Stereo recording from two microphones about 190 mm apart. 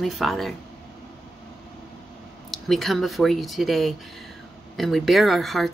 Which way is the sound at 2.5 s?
Centre (ahead or behind).